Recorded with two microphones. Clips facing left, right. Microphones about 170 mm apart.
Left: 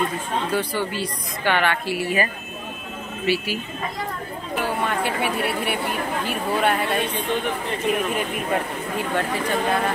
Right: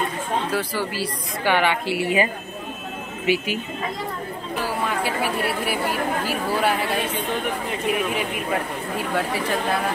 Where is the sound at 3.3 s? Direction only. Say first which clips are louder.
Right 1 dB; 15° right (ahead or behind).